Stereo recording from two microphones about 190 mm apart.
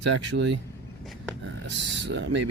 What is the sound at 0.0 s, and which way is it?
Speech, 70° right (ahead or behind).